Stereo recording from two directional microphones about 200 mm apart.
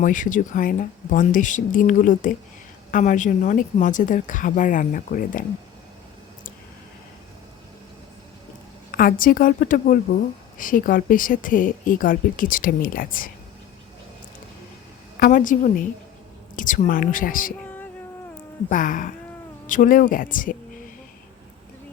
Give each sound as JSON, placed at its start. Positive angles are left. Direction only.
{"t": 0.0, "sound": "a woman's voice", "side_deg": 40}
{"t": 8.9, "sound": "speech", "side_deg": 45}
{"t": 15.2, "sound": "speech", "side_deg": 40}
{"t": 18.7, "sound": "a woman's voice", "side_deg": 40}